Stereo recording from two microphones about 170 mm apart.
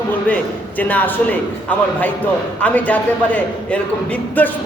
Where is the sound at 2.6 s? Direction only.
10° left (ahead or behind).